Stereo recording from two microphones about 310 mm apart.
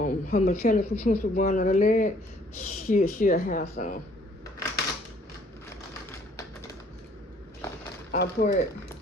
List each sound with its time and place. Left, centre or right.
0.0 s speech: left
8.1 s speech: left